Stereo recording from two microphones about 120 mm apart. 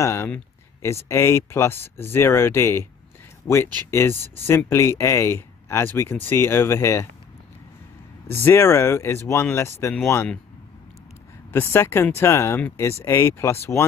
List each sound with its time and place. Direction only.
0.0 s speech: 25° left (ahead or behind)
8.3 s speech: 20° left (ahead or behind)
11.5 s speech: 20° left (ahead or behind)